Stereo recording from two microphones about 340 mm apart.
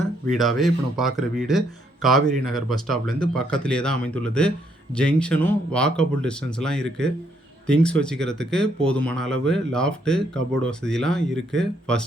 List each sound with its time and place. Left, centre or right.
0.3 s speech: centre